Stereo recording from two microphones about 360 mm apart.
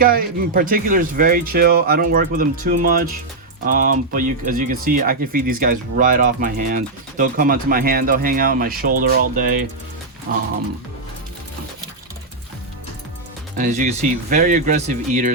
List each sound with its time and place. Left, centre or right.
0.0 s speech: right
13.6 s speech: centre